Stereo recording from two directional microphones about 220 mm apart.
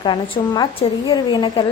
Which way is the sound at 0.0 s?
20° left (ahead or behind).